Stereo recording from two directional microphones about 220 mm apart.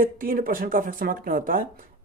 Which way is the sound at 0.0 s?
40° right (ahead or behind).